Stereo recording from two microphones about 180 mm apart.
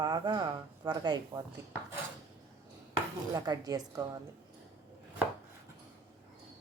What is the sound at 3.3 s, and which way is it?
Speech, 20° right (ahead or behind).